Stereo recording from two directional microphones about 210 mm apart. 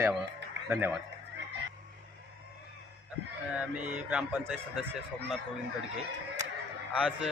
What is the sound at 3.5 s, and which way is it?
Speech, 5° right (ahead or behind).